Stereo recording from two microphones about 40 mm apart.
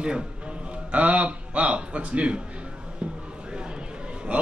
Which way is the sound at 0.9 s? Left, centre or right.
Right.